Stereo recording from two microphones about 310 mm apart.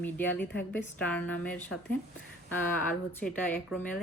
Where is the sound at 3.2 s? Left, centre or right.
Centre.